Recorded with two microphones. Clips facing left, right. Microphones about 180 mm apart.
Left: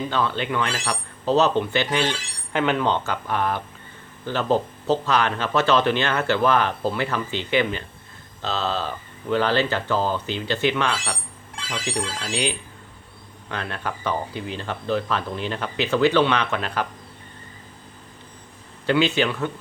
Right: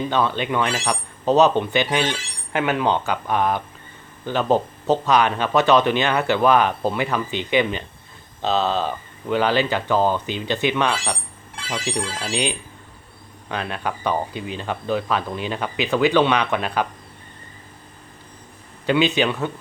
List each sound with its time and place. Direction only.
0.1 s speech: 15° right (ahead or behind)
18.9 s speech: 15° right (ahead or behind)